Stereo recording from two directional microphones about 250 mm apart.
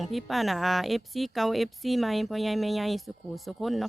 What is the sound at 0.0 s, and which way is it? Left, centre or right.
A woman's voice, centre.